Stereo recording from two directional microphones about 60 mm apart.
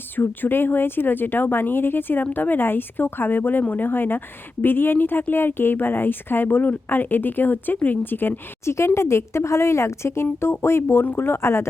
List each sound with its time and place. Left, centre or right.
0.2 s speech: left
8.6 s a woman's voice: left